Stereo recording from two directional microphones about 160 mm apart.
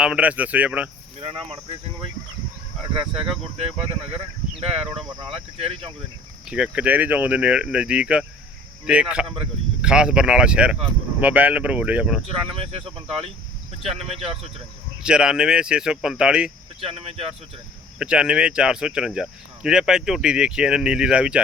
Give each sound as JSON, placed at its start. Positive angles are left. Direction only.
{"t": 0.0, "sound": "speech", "side_deg": -5}
{"t": 1.2, "sound": "speech", "side_deg": -35}
{"t": 3.6, "sound": "speech", "side_deg": -40}
{"t": 5.3, "sound": "speech", "side_deg": -40}
{"t": 6.5, "sound": "speech", "side_deg": -5}
{"t": 9.2, "sound": "speech", "side_deg": -35}
{"t": 9.8, "sound": "speech", "side_deg": -5}
{"t": 12.3, "sound": "speech", "side_deg": -35}
{"t": 15.0, "sound": "speech", "side_deg": -5}
{"t": 16.8, "sound": "speech", "side_deg": -35}
{"t": 18.0, "sound": "speech", "side_deg": -5}